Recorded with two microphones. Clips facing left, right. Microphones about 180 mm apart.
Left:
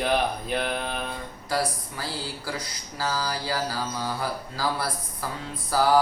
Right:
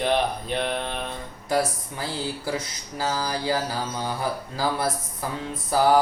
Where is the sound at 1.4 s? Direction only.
20° right (ahead or behind).